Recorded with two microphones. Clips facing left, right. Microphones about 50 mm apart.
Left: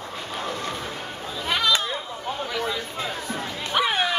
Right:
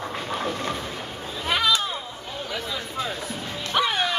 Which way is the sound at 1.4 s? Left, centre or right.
Centre.